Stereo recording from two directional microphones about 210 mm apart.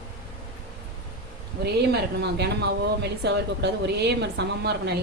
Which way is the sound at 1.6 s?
50° right (ahead or behind).